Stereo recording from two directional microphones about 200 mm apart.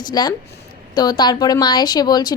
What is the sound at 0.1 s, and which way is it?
Speech, 20° left (ahead or behind).